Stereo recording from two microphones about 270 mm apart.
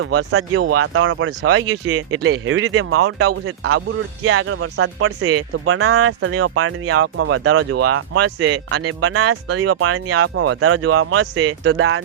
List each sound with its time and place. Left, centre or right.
0.0 s speech: right